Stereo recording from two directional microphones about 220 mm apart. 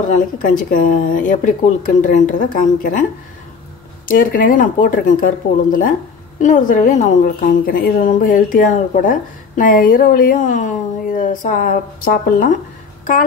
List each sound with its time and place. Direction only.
0.1 s a woman's voice: 35° left (ahead or behind)